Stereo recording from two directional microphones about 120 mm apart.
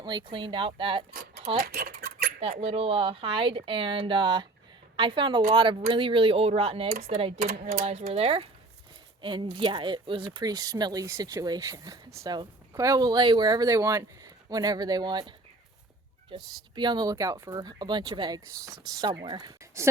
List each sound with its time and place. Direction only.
0.0 s speech: 40° right (ahead or behind)
2.4 s speech: 55° right (ahead or behind)
9.2 s speech: 45° right (ahead or behind)
16.3 s speech: 40° right (ahead or behind)